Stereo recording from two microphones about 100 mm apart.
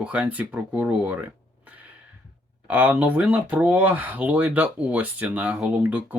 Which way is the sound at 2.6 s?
15° right (ahead or behind).